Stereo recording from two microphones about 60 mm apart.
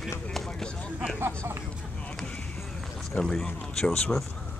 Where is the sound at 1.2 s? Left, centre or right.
Right.